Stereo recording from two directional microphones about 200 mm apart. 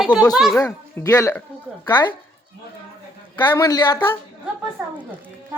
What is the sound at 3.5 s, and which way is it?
Speech, 15° left (ahead or behind).